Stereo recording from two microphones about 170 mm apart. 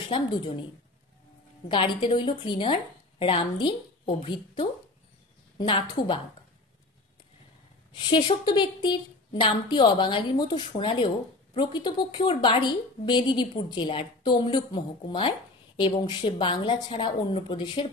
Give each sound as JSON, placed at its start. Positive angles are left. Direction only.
{"t": 0.1, "sound": "a woman's voice", "side_deg": 30}
{"t": 1.7, "sound": "a woman's voice", "side_deg": 30}
{"t": 7.9, "sound": "a woman's voice", "side_deg": 30}